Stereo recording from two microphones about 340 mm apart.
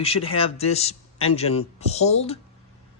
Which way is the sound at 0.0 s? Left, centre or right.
Centre.